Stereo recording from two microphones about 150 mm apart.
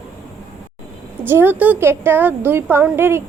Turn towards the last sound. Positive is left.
turn(degrees=-15)  # may be behind; listen again after turning